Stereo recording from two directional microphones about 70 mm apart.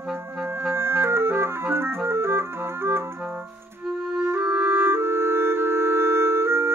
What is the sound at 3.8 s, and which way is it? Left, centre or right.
Music, centre.